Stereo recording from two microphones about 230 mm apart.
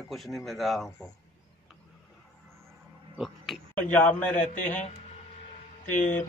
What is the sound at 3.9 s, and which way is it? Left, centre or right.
Speech, centre.